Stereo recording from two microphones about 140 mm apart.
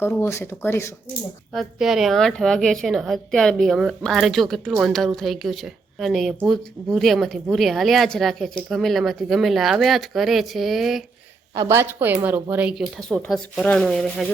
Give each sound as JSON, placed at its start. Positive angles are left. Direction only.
{"t": 0.0, "sound": "speech", "side_deg": 20}
{"t": 1.5, "sound": "speech", "side_deg": -5}
{"t": 11.5, "sound": "speech", "side_deg": -20}